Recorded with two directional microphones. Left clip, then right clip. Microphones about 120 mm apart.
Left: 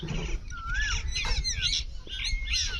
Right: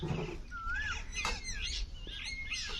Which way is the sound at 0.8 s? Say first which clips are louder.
Left 6 dB; 5° right (ahead or behind).